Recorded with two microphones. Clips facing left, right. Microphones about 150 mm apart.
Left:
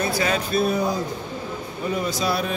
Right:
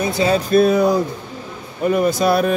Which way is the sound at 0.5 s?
50° right (ahead or behind).